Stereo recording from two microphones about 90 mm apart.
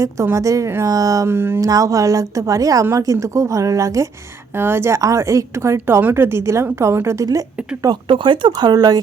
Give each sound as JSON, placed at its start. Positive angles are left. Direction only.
{"t": 0.3, "sound": "a woman's voice", "side_deg": -35}
{"t": 1.3, "sound": "a woman's voice", "side_deg": -25}
{"t": 1.6, "sound": "a woman's voice", "side_deg": -40}
{"t": 4.5, "sound": "a woman's voice", "side_deg": -25}
{"t": 5.7, "sound": "a woman's voice", "side_deg": -20}
{"t": 7.3, "sound": "speech", "side_deg": -45}
{"t": 8.0, "sound": "speech", "side_deg": -65}